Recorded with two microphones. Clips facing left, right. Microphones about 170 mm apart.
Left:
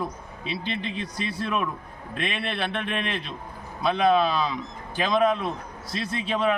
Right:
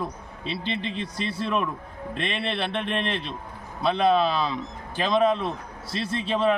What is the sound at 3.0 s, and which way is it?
Speech, 30° right (ahead or behind).